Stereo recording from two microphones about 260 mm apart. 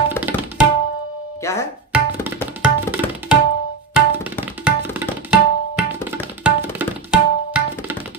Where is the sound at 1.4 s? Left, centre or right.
Centre.